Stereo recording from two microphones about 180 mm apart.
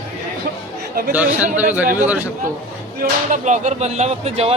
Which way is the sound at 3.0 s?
45° right (ahead or behind).